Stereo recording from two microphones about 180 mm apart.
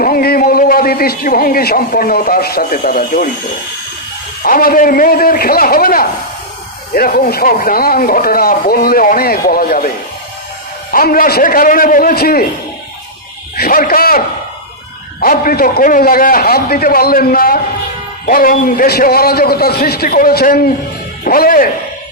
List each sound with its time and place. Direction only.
0.0 s speech: 55° left (ahead or behind)
4.4 s a man's voice: 50° left (ahead or behind)
10.9 s a man's voice: 55° left (ahead or behind)
13.6 s speech: 55° left (ahead or behind)
15.2 s a man's voice: 55° left (ahead or behind)